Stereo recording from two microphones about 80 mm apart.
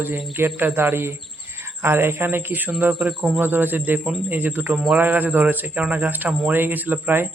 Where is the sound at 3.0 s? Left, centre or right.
Centre.